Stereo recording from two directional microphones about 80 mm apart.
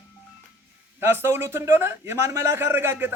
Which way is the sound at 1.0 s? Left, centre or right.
Right.